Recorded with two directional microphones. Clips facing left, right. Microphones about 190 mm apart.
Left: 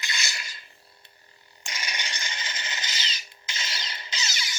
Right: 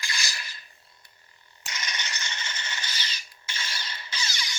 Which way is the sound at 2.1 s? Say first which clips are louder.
Left 1 dB; 30° left (ahead or behind).